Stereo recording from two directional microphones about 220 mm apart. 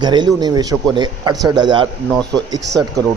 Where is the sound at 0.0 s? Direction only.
20° right (ahead or behind).